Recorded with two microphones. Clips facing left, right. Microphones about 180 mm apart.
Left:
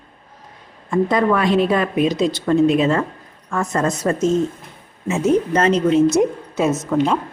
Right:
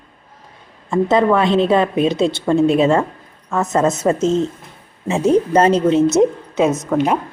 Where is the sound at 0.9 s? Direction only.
25° right (ahead or behind).